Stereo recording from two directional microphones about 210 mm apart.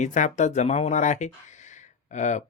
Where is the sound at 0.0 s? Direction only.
35° left (ahead or behind).